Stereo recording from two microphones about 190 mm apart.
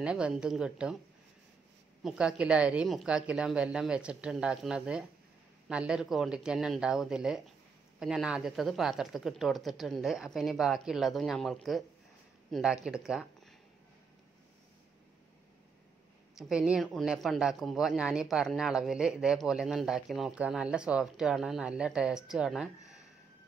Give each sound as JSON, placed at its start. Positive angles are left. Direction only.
{"t": 0.0, "sound": "speech", "side_deg": -5}
{"t": 2.0, "sound": "speech", "side_deg": -5}
{"t": 16.3, "sound": "speech", "side_deg": -5}